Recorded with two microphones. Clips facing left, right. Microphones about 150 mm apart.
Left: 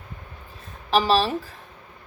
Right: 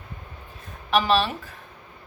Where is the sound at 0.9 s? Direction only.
35° left (ahead or behind).